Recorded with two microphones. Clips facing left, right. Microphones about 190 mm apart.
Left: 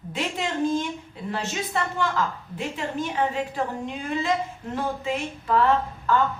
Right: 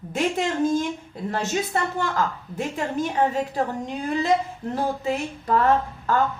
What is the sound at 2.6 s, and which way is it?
A man's voice, 45° right (ahead or behind).